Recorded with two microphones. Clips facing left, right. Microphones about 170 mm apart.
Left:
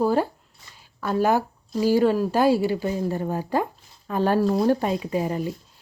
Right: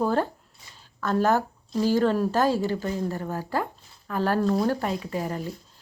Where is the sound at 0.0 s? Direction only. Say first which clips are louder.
Left 3 dB; 10° left (ahead or behind).